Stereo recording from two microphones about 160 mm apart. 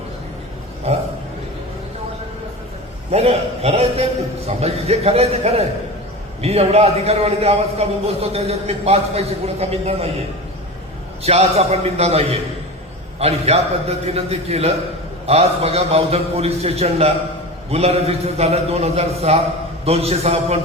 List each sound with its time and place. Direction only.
0.9 s a man's voice: 40° right (ahead or behind)
3.1 s a man's voice: 40° right (ahead or behind)
11.2 s a man's voice: 40° right (ahead or behind)